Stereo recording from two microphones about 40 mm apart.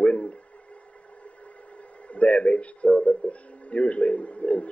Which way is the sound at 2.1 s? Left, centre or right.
Left.